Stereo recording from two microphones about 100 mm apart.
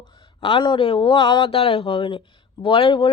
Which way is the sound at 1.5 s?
80° left.